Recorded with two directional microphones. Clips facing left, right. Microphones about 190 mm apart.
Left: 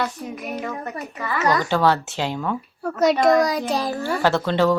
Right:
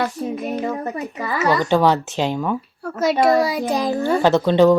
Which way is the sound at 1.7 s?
15° right (ahead or behind).